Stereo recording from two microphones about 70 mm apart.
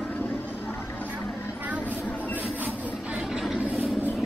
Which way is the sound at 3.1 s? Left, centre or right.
Centre.